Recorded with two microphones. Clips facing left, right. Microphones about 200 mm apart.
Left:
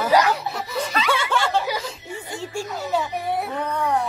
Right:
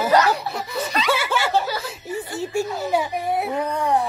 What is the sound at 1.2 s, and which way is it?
Snicker, 5° right (ahead or behind).